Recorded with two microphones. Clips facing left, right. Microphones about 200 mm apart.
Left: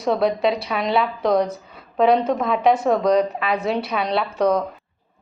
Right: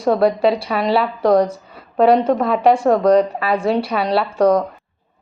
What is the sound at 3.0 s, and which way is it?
Speech, 55° right (ahead or behind).